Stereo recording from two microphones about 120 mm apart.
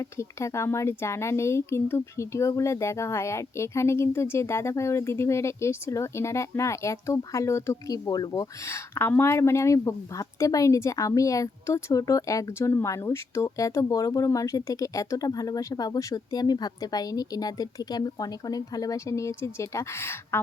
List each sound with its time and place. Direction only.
0.0 s speech: 25° left (ahead or behind)